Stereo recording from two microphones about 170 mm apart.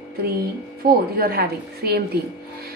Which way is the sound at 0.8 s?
60° right (ahead or behind).